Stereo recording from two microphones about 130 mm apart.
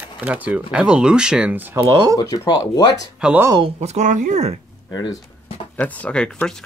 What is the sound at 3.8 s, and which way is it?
Speech, 65° right (ahead or behind).